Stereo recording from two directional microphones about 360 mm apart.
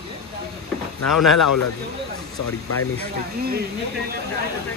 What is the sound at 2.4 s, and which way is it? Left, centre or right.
Speech, left.